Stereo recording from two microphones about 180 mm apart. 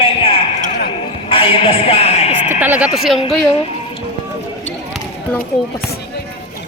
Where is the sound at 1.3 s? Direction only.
30° left (ahead or behind).